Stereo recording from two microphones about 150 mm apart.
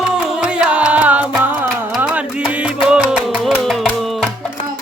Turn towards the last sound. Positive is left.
turn(degrees=5)  # may be behind; listen again after turning